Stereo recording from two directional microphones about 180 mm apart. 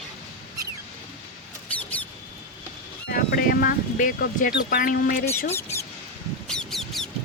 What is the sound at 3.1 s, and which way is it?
Speech, 55° left (ahead or behind).